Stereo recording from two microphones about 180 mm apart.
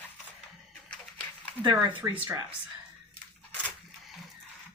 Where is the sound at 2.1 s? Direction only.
10° right (ahead or behind).